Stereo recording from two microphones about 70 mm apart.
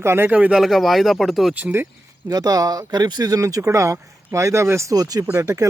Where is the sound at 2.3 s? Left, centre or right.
Right.